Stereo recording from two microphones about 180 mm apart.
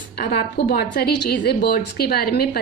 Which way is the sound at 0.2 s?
65° left (ahead or behind).